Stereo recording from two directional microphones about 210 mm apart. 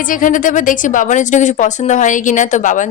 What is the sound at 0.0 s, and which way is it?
Speech, 40° left (ahead or behind).